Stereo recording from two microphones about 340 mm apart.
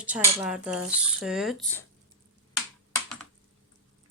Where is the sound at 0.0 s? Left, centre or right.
Centre.